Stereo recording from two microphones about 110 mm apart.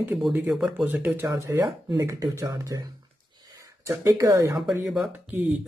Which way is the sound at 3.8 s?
25° right (ahead or behind).